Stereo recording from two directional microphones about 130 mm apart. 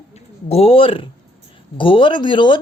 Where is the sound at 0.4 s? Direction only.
50° left (ahead or behind).